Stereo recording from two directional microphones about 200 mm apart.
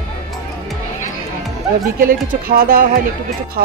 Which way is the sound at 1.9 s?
45° right (ahead or behind).